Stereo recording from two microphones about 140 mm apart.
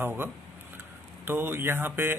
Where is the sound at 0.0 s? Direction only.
15° right (ahead or behind).